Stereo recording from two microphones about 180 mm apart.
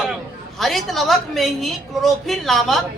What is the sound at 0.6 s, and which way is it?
A woman's voice, centre (ahead or behind).